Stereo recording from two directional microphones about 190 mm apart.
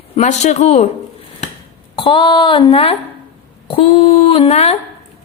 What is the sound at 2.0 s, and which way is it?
Speech, 25° left (ahead or behind).